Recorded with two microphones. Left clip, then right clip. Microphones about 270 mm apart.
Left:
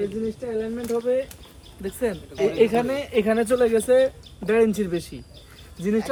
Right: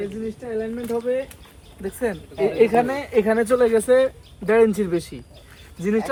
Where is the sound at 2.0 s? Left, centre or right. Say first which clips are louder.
Right 1 dB; centre.